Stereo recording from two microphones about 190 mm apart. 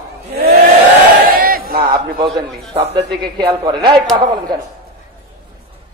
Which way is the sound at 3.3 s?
25° right (ahead or behind).